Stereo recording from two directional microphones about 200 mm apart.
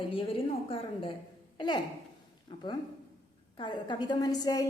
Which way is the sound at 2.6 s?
25° left (ahead or behind).